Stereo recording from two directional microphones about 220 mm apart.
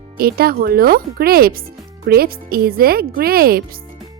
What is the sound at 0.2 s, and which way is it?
Speech, 45° right (ahead or behind).